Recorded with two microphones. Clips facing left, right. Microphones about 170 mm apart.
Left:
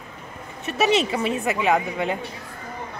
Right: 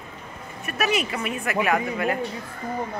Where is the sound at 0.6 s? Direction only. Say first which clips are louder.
Left 5 dB; 25° left (ahead or behind).